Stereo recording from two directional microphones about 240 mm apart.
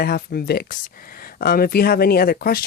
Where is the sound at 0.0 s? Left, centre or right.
Left.